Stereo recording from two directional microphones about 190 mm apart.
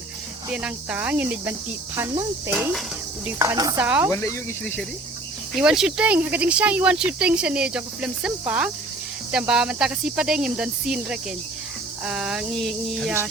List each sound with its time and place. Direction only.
0.5 s speech: 5° right (ahead or behind)
3.2 s speech: 15° right (ahead or behind)
4.1 s speech: 15° left (ahead or behind)
5.5 s speech: 5° right (ahead or behind)